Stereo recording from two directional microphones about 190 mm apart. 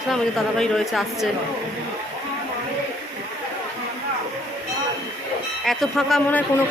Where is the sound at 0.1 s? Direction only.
Centre (ahead or behind).